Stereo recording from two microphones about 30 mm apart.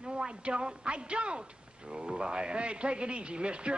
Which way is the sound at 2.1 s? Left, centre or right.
Right.